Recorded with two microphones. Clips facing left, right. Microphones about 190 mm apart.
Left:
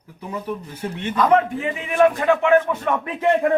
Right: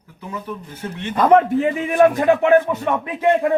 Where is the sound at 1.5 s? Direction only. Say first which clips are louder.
Right 3 dB; 45° right (ahead or behind).